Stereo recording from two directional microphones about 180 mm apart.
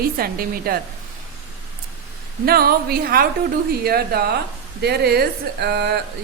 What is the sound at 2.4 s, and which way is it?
A woman's voice, 60° right (ahead or behind).